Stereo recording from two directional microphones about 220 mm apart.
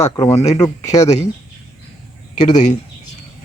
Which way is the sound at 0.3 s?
25° left (ahead or behind).